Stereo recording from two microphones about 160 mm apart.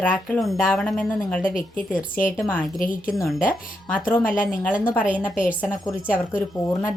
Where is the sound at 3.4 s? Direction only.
10° left (ahead or behind).